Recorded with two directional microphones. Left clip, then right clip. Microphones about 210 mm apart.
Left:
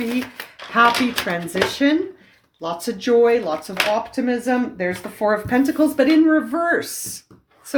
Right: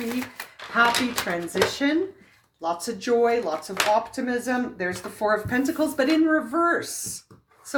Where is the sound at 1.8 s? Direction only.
35° left (ahead or behind).